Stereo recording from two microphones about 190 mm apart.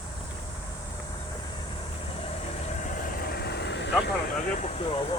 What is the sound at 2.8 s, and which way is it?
Vehicle, 45° left (ahead or behind).